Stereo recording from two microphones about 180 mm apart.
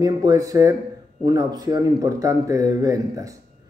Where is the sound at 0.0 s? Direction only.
20° right (ahead or behind).